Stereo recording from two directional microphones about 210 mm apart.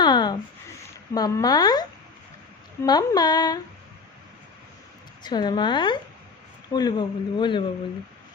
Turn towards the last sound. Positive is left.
turn(degrees=20)  # may be behind; listen again after turning